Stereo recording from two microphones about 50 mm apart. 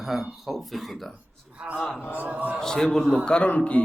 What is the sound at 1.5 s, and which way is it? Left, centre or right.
A man's voice, right.